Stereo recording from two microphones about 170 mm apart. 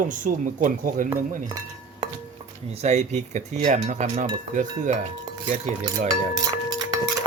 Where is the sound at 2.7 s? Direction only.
40° right (ahead or behind).